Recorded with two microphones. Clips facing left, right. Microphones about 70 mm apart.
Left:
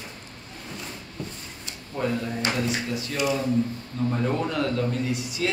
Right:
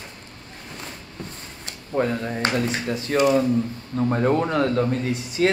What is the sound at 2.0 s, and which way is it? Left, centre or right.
Speech, right.